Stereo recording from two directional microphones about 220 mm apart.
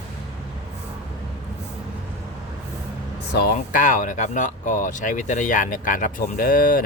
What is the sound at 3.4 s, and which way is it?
Speech, 40° left (ahead or behind).